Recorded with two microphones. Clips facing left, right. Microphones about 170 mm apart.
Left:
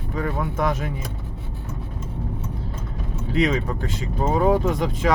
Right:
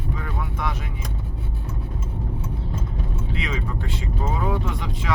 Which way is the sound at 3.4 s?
40° left (ahead or behind).